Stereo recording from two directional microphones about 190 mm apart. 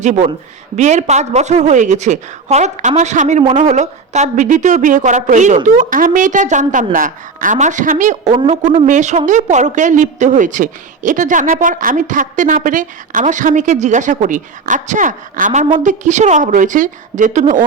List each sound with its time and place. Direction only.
0.0 s a woman's voice: 40° right (ahead or behind)